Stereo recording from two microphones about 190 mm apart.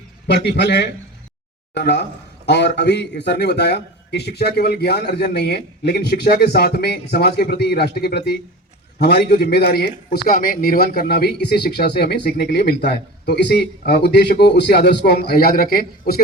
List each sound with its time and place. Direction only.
0.3 s a man's voice: 60° left (ahead or behind)